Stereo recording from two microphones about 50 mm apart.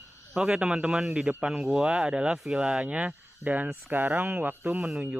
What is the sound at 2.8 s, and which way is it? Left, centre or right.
Speech, right.